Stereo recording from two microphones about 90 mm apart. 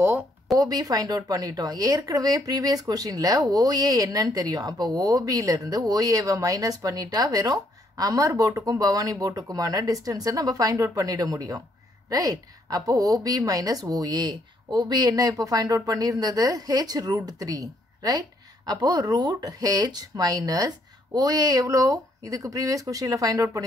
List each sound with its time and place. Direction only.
0.5 s a woman's voice: 45° right (ahead or behind)